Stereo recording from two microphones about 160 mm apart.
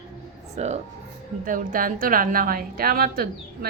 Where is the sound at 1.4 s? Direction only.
60° right (ahead or behind).